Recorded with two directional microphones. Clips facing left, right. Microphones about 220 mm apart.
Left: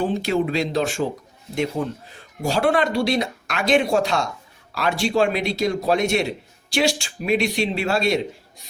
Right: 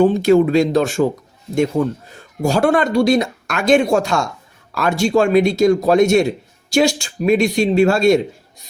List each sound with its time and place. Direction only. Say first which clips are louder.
0.0 s speech: right 9 dB; 45° right (ahead or behind)
2.0 s speech: right 6 dB; 45° right (ahead or behind)